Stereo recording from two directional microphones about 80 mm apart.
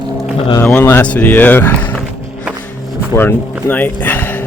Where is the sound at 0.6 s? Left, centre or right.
Left.